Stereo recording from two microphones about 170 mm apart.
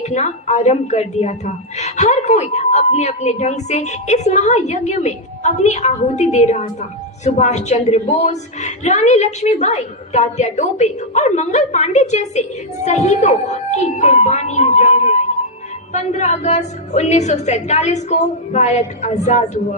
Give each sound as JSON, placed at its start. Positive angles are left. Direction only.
{"t": 0.0, "sound": "a woman's voice", "side_deg": 40}